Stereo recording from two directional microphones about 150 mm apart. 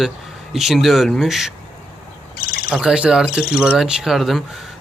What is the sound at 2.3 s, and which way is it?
Bird, 80° left.